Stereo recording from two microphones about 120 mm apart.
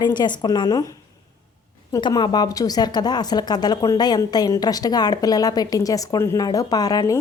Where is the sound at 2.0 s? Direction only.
35° left (ahead or behind).